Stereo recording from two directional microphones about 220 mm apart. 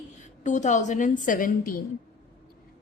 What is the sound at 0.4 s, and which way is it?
Speech, 35° left (ahead or behind).